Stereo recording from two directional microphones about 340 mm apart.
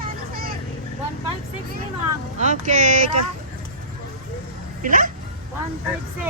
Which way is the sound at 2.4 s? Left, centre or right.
Right.